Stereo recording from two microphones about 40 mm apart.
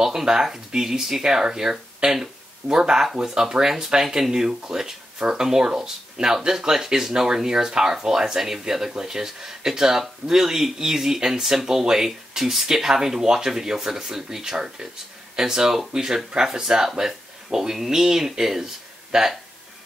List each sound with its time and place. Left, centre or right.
0.0 s speech: centre